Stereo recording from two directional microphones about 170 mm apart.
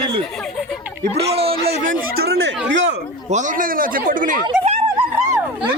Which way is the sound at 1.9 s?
65° right (ahead or behind).